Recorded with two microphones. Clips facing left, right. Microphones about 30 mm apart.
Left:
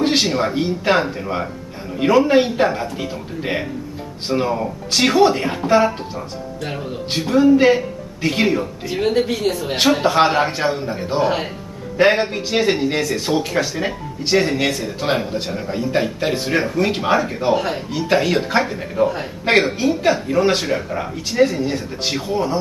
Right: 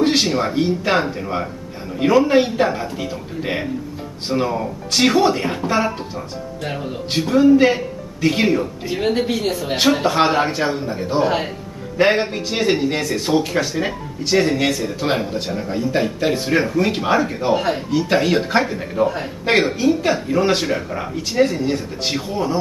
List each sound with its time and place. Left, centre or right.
0.0 s speech: centre